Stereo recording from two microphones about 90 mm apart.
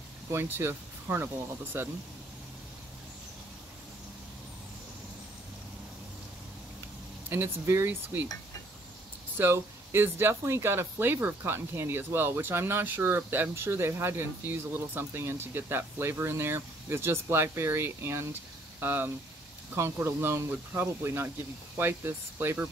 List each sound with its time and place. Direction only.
0.3 s speech: 25° right (ahead or behind)
7.2 s speech: 25° right (ahead or behind)
9.4 s speech: 25° right (ahead or behind)